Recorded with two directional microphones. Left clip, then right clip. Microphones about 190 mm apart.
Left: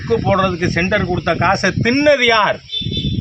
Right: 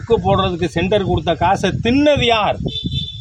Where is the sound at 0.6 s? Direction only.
10° right (ahead or behind).